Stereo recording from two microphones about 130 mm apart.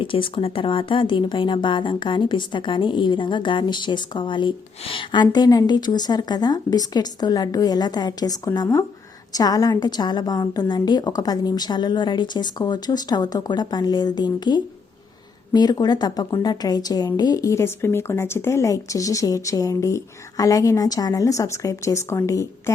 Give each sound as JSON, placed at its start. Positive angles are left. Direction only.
{"t": 0.0, "sound": "a woman's voice", "side_deg": 40}